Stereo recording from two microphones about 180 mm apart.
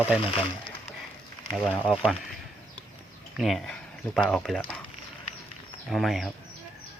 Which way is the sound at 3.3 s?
Centre (ahead or behind).